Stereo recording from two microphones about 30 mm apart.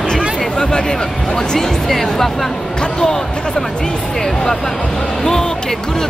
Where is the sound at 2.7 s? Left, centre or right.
Left.